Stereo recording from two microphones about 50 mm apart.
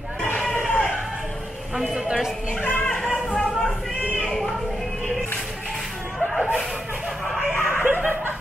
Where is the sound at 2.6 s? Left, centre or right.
Left.